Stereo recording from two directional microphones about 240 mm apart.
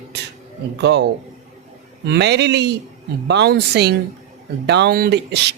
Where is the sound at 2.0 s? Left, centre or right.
Right.